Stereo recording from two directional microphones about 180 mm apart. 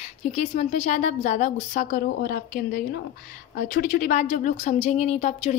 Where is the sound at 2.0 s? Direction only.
55° left (ahead or behind).